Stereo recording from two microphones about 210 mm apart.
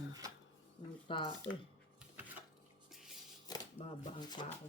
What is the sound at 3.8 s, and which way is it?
Speech, 20° left (ahead or behind).